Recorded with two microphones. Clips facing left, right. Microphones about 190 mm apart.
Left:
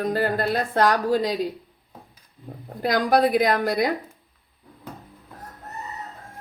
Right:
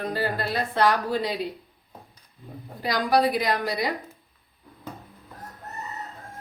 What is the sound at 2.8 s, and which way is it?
Speech, 50° left (ahead or behind).